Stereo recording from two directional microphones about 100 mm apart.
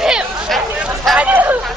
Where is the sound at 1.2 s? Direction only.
15° right (ahead or behind).